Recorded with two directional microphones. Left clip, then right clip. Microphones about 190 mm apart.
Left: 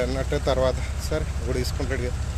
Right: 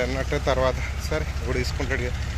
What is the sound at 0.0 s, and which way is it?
Speech, 15° left (ahead or behind).